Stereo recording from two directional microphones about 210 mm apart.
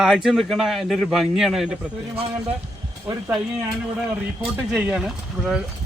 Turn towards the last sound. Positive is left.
turn(degrees=0)  # may be behind; listen again after turning